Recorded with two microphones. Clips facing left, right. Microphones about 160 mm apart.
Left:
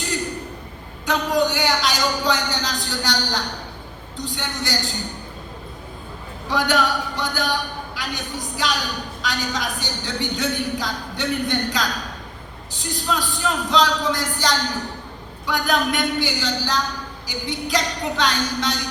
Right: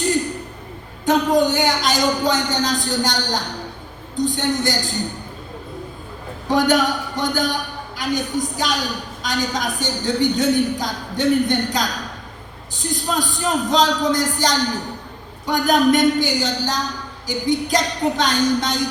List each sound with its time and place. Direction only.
1.0 s a man's voice: 45° right (ahead or behind)
6.5 s a man's voice: 45° right (ahead or behind)